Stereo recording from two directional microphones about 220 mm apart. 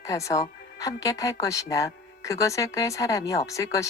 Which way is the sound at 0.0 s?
15° left (ahead or behind).